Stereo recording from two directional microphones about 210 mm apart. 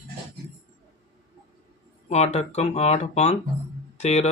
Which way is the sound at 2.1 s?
30° left (ahead or behind).